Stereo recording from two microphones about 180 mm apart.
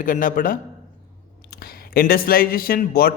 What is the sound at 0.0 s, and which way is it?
A man's voice, 50° left (ahead or behind).